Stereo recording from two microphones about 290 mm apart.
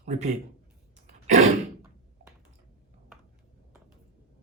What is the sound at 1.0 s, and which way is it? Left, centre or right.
Throat clearing, right.